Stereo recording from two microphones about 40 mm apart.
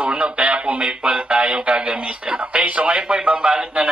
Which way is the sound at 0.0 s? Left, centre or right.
Right.